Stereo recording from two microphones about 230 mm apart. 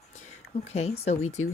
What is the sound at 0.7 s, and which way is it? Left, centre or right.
Speech, left.